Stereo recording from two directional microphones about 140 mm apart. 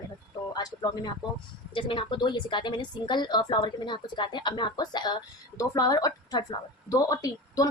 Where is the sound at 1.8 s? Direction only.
40° left (ahead or behind).